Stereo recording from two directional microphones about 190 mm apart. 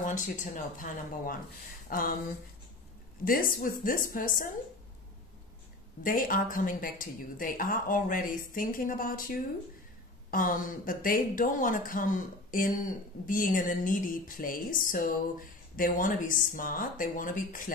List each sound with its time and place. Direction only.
0.0 s speech: 45° left (ahead or behind)
3.3 s speech: 50° left (ahead or behind)
6.0 s speech: 45° left (ahead or behind)